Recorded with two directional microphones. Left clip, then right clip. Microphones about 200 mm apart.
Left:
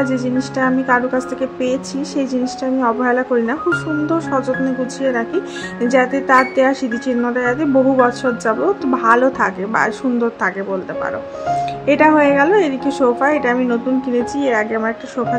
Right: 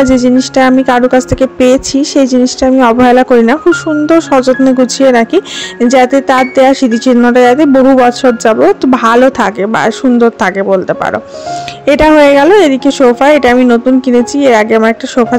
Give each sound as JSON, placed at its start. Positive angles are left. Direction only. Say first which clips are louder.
{"t": 0.0, "sound": "a woman's voice", "louder": "right 11 dB", "side_deg": -40}